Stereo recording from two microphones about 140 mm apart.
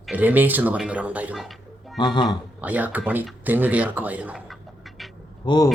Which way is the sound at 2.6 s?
10° right (ahead or behind).